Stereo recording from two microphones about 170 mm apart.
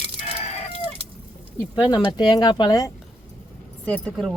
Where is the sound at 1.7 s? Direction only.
25° left (ahead or behind).